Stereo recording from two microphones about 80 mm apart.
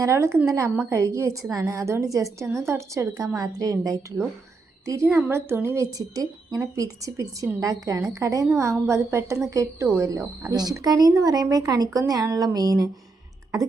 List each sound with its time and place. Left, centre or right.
0.0 s a woman's voice: right
5.0 s a woman's voice: right
9.8 s a woman's voice: right
10.5 s speech: right